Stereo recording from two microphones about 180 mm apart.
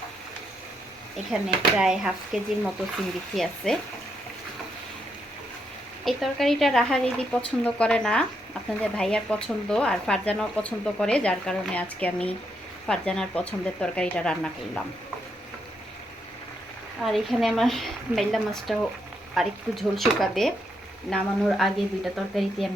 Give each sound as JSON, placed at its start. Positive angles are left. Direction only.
{"t": 1.8, "sound": "speech", "side_deg": -5}
{"t": 6.1, "sound": "speech", "side_deg": 0}
{"t": 17.0, "sound": "speech", "side_deg": 0}